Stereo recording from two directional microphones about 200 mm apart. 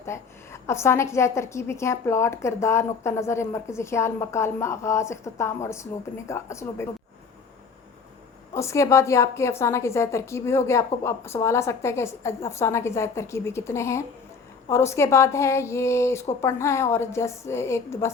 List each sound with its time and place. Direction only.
0.0 s a woman's voice: 15° left (ahead or behind)
8.5 s a woman's voice: 15° left (ahead or behind)